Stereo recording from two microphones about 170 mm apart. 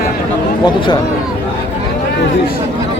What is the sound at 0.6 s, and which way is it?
Speech, 25° left (ahead or behind).